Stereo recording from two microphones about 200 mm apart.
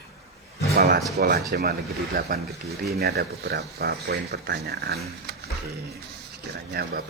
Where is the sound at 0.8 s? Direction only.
50° right (ahead or behind).